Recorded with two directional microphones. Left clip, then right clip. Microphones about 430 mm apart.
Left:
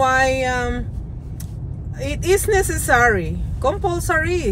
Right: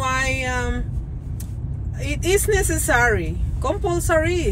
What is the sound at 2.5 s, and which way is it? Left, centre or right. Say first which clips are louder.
A woman's voice: left 3 dB; centre.